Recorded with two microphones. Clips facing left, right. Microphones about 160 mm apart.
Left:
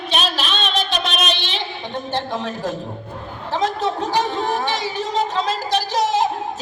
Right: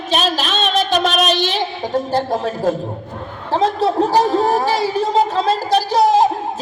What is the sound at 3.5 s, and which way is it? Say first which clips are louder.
Speech: right 6 dB; 35° right (ahead or behind).